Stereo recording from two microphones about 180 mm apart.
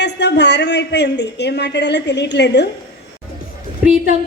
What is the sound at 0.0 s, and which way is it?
A woman's voice, 70° left (ahead or behind).